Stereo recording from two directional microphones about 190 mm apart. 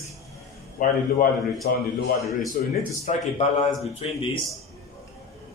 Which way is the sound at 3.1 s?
35° left (ahead or behind).